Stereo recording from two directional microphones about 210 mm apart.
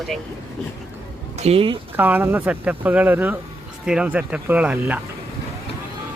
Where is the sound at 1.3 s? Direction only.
30° right (ahead or behind).